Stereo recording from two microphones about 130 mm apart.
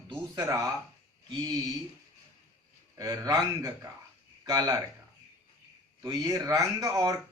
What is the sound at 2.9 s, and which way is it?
Speech, 25° right (ahead or behind).